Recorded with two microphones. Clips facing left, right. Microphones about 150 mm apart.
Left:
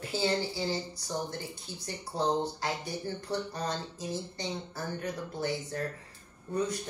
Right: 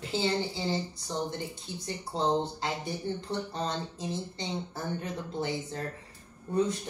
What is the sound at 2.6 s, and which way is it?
Speech, 25° right (ahead or behind).